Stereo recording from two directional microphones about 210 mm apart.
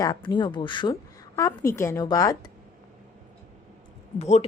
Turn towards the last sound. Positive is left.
turn(degrees=30)  # may be behind; listen again after turning